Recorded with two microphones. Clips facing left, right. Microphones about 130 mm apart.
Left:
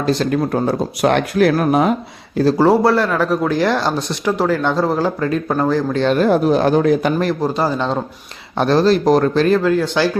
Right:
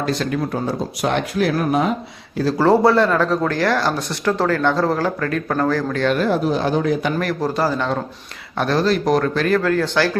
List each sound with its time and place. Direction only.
0.0 s speech: 30° left (ahead or behind)
0.3 s speech: 55° left (ahead or behind)
2.6 s speech: 5° left (ahead or behind); by 6.1 s 25° left (ahead or behind)
6.1 s speech: 45° left (ahead or behind)
7.2 s speech: 20° left (ahead or behind)